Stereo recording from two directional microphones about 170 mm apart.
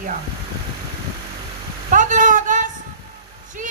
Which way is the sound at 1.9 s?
50° right (ahead or behind).